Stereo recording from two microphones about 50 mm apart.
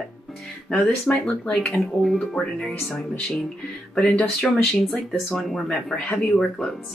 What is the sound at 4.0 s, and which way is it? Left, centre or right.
Speech, centre.